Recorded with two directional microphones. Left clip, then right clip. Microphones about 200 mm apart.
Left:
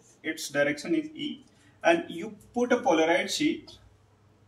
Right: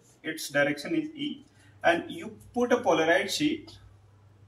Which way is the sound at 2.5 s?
15° left (ahead or behind).